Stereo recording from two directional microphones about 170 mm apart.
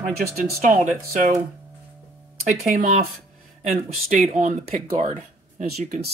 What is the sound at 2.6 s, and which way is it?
Speech, 45° right (ahead or behind).